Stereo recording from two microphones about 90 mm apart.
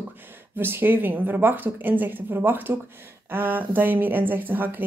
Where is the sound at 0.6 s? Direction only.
25° right (ahead or behind).